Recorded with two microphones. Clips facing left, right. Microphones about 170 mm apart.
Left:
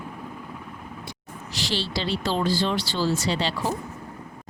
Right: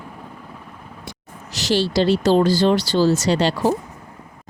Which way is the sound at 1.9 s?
45° right (ahead or behind).